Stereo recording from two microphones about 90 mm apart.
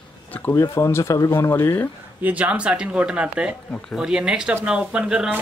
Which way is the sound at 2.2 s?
15° right (ahead or behind).